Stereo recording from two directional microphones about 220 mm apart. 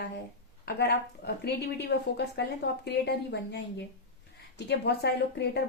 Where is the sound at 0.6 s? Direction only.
45° left (ahead or behind).